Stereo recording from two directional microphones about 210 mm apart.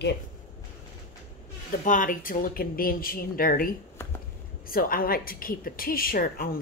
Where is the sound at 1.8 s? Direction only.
40° left (ahead or behind).